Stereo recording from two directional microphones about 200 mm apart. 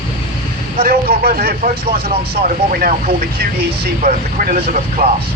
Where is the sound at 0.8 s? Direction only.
50° right (ahead or behind).